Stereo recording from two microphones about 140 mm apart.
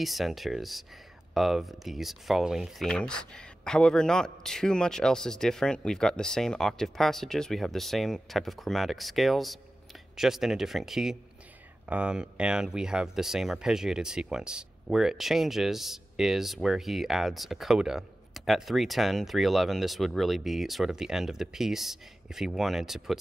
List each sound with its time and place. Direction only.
0.0 s speech: centre (ahead or behind)